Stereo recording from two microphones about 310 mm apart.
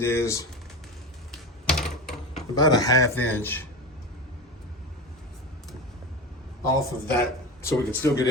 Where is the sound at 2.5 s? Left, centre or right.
Centre.